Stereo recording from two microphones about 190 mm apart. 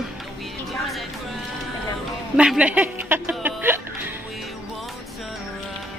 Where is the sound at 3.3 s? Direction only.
5° right (ahead or behind).